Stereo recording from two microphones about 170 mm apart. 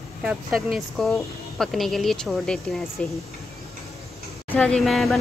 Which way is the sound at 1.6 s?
Centre (ahead or behind).